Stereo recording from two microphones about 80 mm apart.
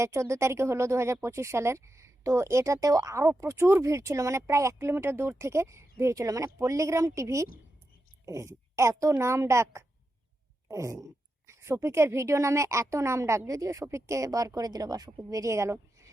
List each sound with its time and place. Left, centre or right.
0.0 s speech: right